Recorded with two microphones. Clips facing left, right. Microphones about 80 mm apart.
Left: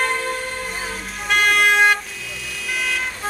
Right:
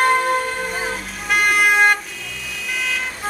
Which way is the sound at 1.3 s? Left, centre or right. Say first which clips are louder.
Even; centre.